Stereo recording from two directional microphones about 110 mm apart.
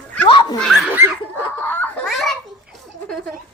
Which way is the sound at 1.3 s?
15° left (ahead or behind).